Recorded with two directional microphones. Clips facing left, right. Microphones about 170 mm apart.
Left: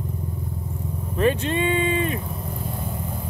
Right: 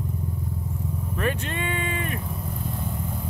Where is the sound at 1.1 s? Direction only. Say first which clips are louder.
Left 8 dB; 25° left (ahead or behind).